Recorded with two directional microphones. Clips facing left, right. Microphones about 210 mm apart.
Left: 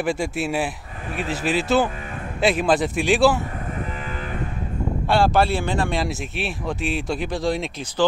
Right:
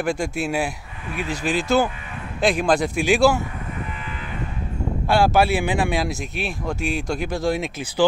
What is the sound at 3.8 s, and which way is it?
Cattle, 40° left (ahead or behind).